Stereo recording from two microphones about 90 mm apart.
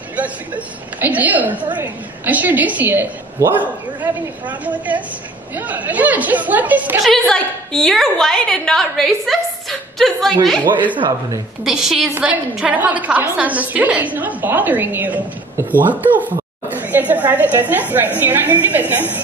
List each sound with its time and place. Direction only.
1.0 s a woman's voice: 20° right (ahead or behind)
7.0 s a woman's voice: 5° left (ahead or behind)
10.6 s a woman's voice: 20° right (ahead or behind)
11.6 s a woman's voice: 5° right (ahead or behind); by 19.2 s 20° right (ahead or behind)